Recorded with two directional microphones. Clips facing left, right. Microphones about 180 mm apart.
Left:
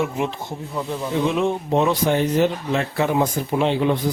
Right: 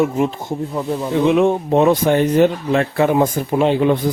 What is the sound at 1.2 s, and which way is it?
Speech, 60° right (ahead or behind).